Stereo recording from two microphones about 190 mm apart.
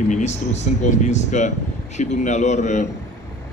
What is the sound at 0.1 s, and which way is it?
A man's voice, 35° left (ahead or behind).